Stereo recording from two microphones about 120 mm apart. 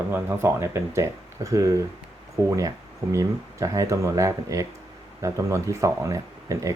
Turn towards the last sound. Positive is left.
turn(degrees=-25)  # may be behind; listen again after turning